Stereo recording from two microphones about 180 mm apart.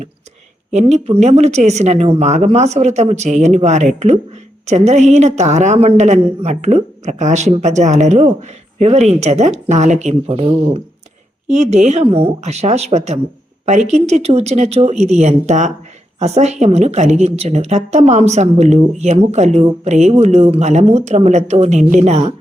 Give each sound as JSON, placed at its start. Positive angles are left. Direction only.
{"t": 0.7, "sound": "speech", "side_deg": -40}